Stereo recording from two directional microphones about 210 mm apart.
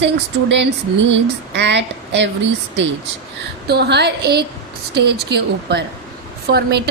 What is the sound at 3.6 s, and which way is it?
A woman's voice, 50° right (ahead or behind).